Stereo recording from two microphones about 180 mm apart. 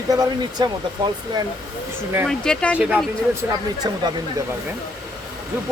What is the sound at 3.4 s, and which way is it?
Speech, 10° right (ahead or behind).